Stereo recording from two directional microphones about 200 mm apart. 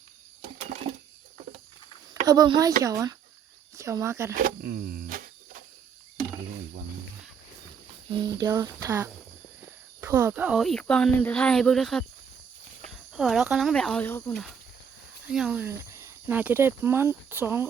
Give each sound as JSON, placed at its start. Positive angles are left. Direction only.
{"t": 2.2, "sound": "speech", "side_deg": -20}
{"t": 4.4, "sound": "speech", "side_deg": -45}
{"t": 8.1, "sound": "speech", "side_deg": -20}